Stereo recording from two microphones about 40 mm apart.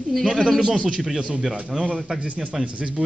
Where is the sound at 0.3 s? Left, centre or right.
Centre.